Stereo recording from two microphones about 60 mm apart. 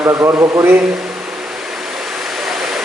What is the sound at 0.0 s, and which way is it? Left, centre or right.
Speech, right.